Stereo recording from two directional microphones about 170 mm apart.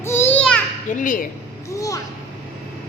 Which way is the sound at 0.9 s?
50° left (ahead or behind).